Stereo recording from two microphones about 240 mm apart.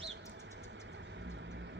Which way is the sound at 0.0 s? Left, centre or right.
Right.